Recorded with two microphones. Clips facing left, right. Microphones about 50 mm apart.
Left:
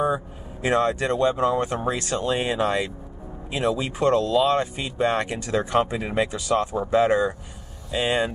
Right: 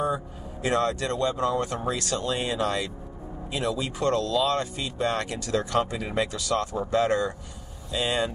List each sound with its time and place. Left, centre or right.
0.0 s speech: left